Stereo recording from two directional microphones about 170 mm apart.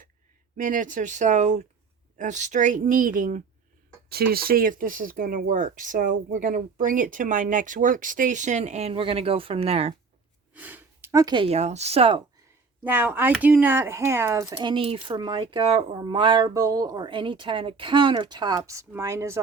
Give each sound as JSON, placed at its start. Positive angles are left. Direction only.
{"t": 0.5, "sound": "speech", "side_deg": -50}
{"t": 4.1, "sound": "speech", "side_deg": -65}
{"t": 10.5, "sound": "speech", "side_deg": -10}
{"t": 12.8, "sound": "speech", "side_deg": -10}